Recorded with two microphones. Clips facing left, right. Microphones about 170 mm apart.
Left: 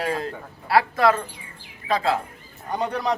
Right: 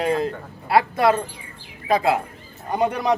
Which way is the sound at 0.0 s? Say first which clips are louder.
Right 5 dB; 25° right (ahead or behind).